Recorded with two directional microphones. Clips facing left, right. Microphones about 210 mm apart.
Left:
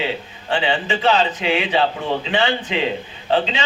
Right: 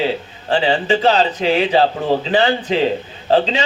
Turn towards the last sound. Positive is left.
turn(degrees=-35)  # may be behind; listen again after turning